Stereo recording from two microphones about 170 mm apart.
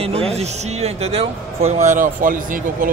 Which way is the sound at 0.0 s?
35° right (ahead or behind).